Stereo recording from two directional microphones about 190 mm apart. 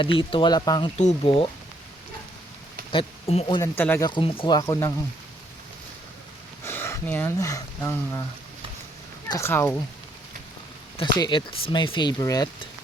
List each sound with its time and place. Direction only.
0.0 s speech: 25° left (ahead or behind)
0.9 s speech: 35° left (ahead or behind)
2.9 s speech: 30° left (ahead or behind)
3.6 s speech: 10° left (ahead or behind)
4.1 s speech: 25° left (ahead or behind)
6.7 s speech: 15° left (ahead or behind)
9.3 s speech: 10° left (ahead or behind)
10.9 s speech: 25° left (ahead or behind)